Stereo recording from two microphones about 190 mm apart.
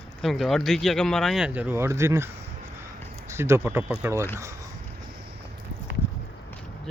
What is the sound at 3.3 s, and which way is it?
Speech, 15° right (ahead or behind).